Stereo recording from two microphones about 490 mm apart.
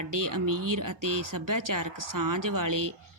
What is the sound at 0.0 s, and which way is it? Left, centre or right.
A woman's voice, right.